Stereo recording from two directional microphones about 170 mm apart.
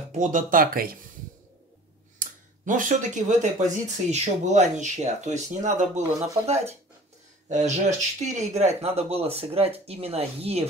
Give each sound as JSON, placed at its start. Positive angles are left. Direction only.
{"t": 0.2, "sound": "speech", "side_deg": -50}
{"t": 2.1, "sound": "speech", "side_deg": -50}